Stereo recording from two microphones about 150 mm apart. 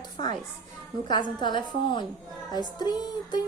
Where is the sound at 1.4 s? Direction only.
30° left (ahead or behind).